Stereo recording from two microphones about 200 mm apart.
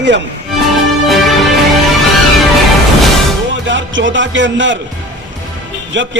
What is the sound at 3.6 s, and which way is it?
Speech, 65° right (ahead or behind).